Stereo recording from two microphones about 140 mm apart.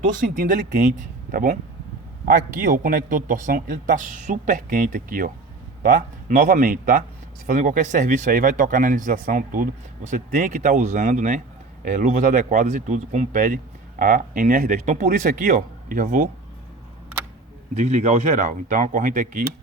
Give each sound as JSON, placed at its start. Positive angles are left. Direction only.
{"t": 0.0, "sound": "a man's voice", "side_deg": -75}
{"t": 7.4, "sound": "a man's voice", "side_deg": -60}
{"t": 17.7, "sound": "a man's voice", "side_deg": -60}